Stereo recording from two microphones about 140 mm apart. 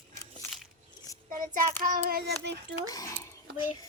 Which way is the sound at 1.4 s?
75° right (ahead or behind).